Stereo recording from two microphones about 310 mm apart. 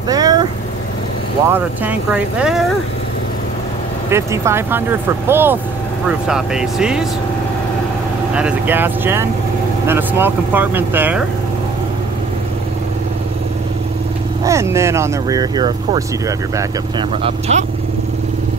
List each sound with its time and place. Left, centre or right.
0.1 s vehicle: centre
1.5 s speech: centre
4.1 s speech: centre
8.4 s speech: centre
14.4 s speech: centre